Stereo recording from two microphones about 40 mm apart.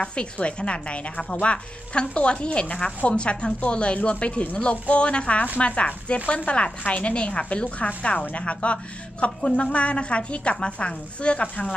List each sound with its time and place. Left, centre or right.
0.0 s a woman's voice: left